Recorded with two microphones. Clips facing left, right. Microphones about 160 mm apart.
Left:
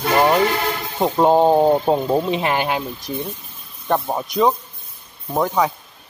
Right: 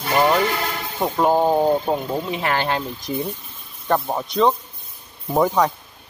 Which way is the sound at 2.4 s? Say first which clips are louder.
Left 2 dB; 15° left (ahead or behind).